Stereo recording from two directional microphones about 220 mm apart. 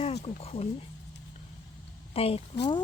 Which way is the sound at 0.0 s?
30° left (ahead or behind).